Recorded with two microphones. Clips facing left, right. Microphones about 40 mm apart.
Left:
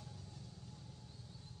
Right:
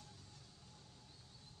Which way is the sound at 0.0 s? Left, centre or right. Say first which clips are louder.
Left 6 dB; centre.